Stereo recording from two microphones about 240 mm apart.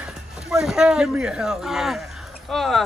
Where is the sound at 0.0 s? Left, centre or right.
Centre.